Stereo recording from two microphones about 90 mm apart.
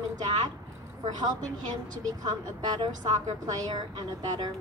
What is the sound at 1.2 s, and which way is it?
A woman's voice, 45° right (ahead or behind).